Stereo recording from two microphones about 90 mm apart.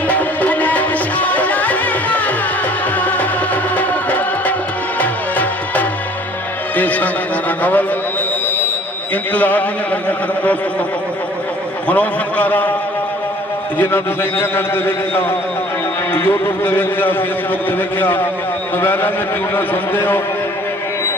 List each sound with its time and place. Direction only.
0.1 s music: 15° left (ahead or behind)
6.7 s a sound: 20° left (ahead or behind)
9.3 s speech: 20° left (ahead or behind)
11.9 s a man's voice: 20° left (ahead or behind)
13.7 s a man's voice: 25° left (ahead or behind)